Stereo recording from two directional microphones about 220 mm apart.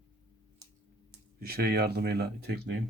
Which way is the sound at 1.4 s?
45° right (ahead or behind).